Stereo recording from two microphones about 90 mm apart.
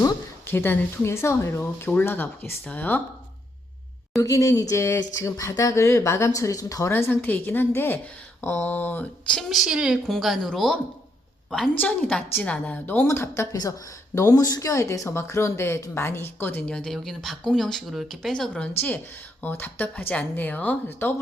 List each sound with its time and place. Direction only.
0.4 s speech: 25° left (ahead or behind)
4.2 s speech: 35° left (ahead or behind)
6.9 s speech: 25° left (ahead or behind)
9.4 s a woman's voice: centre (ahead or behind)
11.8 s a woman's voice: 15° left (ahead or behind)
13.1 s speech: 30° left (ahead or behind); by 18.7 s 10° left (ahead or behind)
19.4 s speech: 20° left (ahead or behind)